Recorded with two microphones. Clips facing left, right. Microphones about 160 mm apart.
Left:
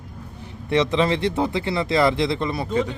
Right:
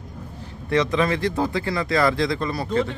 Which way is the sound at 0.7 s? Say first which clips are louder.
Left 1 dB; 25° left (ahead or behind).